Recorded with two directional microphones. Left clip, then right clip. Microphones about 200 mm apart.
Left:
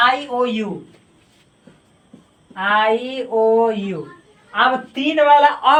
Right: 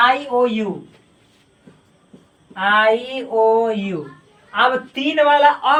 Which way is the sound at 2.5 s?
10° right (ahead or behind).